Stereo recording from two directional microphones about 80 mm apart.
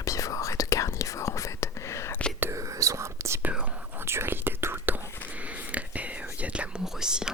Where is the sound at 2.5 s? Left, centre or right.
Right.